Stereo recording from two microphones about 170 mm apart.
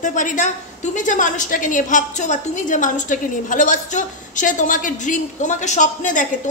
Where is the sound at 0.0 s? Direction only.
50° left (ahead or behind).